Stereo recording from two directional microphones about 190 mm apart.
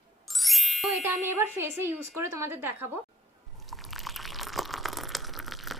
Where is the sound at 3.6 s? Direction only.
Centre (ahead or behind).